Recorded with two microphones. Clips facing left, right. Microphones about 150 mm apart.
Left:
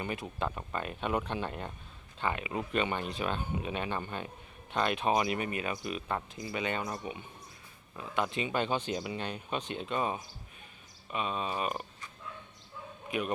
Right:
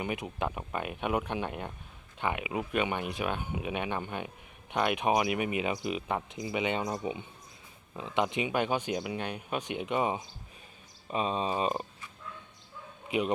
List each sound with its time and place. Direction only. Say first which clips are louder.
0.0 s speech: right 2 dB; 15° right (ahead or behind)
11.1 s speech: right 4 dB; 30° right (ahead or behind)